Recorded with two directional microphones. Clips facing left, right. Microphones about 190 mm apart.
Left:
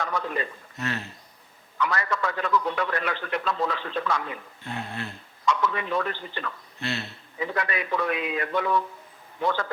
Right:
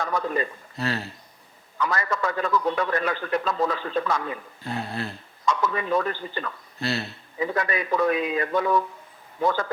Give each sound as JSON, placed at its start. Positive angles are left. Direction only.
{"t": 0.0, "sound": "a man's voice", "side_deg": -40}